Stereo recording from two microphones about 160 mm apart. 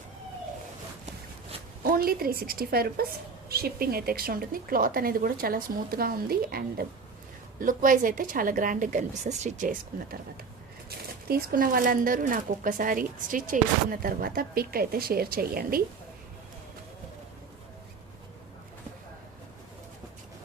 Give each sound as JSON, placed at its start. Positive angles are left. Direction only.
{"t": 1.8, "sound": "a woman's voice", "side_deg": -65}
{"t": 7.6, "sound": "speech", "side_deg": -55}
{"t": 10.8, "sound": "speech", "side_deg": -70}